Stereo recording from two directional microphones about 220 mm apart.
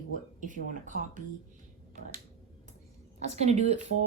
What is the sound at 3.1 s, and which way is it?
Speech, 30° right (ahead or behind).